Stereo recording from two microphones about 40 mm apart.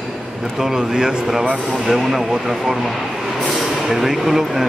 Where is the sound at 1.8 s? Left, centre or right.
Centre.